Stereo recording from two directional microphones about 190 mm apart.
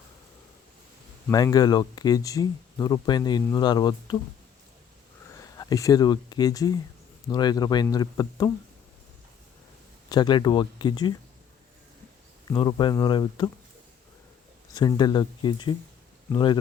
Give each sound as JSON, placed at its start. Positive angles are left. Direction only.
{"t": 1.3, "sound": "speech", "side_deg": 20}
{"t": 5.5, "sound": "speech", "side_deg": 20}
{"t": 10.1, "sound": "speech", "side_deg": 25}
{"t": 12.5, "sound": "speech", "side_deg": 25}
{"t": 14.7, "sound": "speech", "side_deg": 20}